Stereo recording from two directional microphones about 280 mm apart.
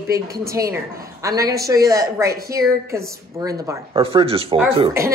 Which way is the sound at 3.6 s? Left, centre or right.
Centre.